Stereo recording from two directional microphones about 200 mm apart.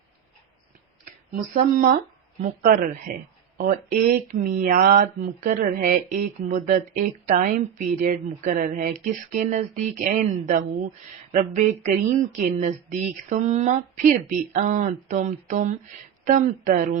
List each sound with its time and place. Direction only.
1.5 s speech: 45° right (ahead or behind)